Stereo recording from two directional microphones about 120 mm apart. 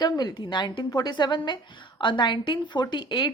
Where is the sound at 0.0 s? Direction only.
35° left (ahead or behind).